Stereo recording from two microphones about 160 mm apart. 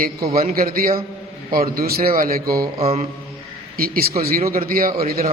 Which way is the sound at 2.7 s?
40° right (ahead or behind).